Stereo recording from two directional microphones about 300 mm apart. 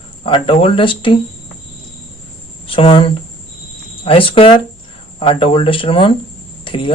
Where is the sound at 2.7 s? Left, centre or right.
Centre.